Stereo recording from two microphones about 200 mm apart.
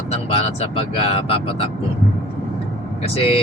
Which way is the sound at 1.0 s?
30° left (ahead or behind).